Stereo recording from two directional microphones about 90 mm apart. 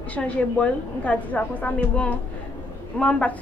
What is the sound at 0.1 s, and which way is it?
A woman's voice, 15° left (ahead or behind).